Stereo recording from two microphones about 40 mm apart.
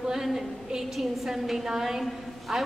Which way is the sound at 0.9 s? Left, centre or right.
Centre.